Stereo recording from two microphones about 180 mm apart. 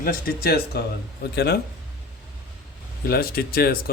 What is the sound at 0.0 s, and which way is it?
Speech, 55° left (ahead or behind).